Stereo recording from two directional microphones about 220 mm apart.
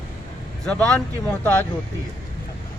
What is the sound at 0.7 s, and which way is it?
Speech, 5° left (ahead or behind).